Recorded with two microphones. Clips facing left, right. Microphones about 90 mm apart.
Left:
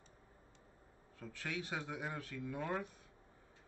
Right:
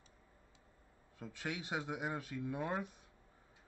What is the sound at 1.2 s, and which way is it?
Speech, 20° right (ahead or behind).